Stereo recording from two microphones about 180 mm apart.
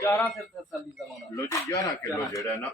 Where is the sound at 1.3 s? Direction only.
20° left (ahead or behind).